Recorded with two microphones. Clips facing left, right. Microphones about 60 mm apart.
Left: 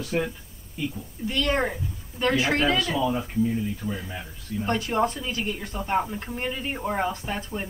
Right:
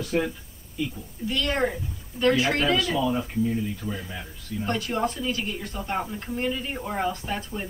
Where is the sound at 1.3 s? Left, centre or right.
Left.